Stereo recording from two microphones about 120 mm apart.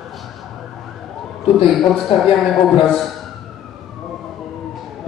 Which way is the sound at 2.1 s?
55° left (ahead or behind).